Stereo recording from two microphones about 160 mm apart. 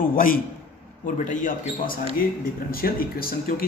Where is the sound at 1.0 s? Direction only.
55° left (ahead or behind).